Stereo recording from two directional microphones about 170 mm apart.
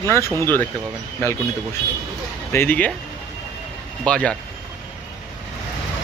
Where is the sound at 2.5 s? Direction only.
10° left (ahead or behind).